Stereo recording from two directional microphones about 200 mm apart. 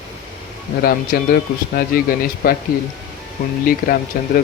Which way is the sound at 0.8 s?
50° left (ahead or behind).